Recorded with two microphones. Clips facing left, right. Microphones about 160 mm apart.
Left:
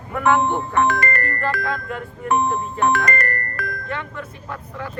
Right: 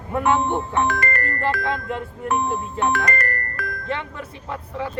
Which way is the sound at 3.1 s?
60° left (ahead or behind).